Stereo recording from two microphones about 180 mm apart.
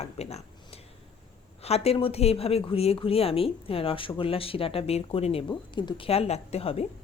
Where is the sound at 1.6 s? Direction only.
35° left (ahead or behind).